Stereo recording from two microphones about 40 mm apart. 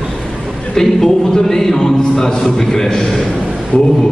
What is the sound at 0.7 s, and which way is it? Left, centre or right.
A man's voice, centre.